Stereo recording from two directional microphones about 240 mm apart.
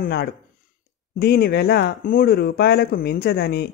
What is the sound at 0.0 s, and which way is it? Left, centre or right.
Speech, left.